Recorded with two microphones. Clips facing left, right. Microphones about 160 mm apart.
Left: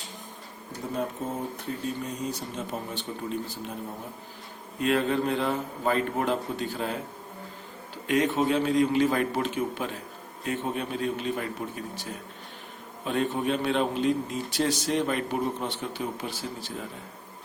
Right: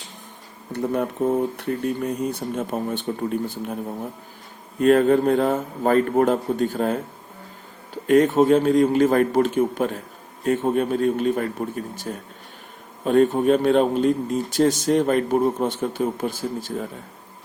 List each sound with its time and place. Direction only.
0.7 s speech: 65° right (ahead or behind)
4.8 s a man's voice: 45° right (ahead or behind)
8.0 s a man's voice: 45° right (ahead or behind)